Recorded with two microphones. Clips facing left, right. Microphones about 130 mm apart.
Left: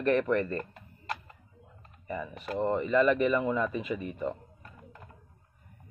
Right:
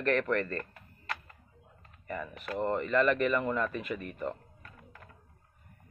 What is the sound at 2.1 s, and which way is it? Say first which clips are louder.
Speech: left 2 dB; 5° left (ahead or behind).